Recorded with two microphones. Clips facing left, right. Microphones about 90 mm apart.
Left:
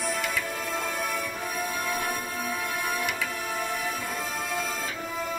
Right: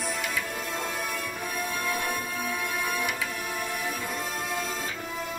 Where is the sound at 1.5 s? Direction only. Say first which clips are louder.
Even; 15° left (ahead or behind).